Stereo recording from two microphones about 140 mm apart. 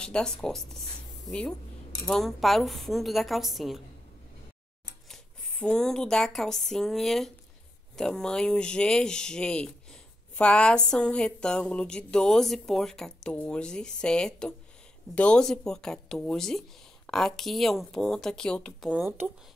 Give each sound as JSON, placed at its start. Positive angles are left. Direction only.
{"t": 0.0, "sound": "speech", "side_deg": 5}
{"t": 5.0, "sound": "speech", "side_deg": 5}
{"t": 18.9, "sound": "speech", "side_deg": -10}